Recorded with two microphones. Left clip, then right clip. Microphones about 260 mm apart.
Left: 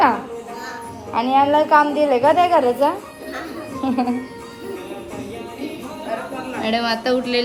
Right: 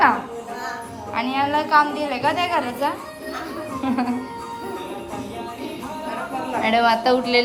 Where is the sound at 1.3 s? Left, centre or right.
Right.